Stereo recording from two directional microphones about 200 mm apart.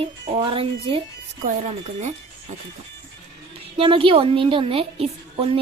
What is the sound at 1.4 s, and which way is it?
Speech, 40° right (ahead or behind).